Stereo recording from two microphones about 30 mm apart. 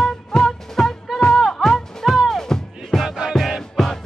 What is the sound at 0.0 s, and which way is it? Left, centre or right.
Music, centre.